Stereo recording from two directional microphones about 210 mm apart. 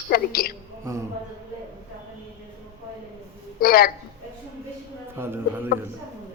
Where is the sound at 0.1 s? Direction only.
45° left (ahead or behind).